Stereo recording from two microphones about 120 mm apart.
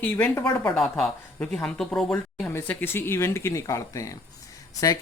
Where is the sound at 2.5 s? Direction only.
20° left (ahead or behind).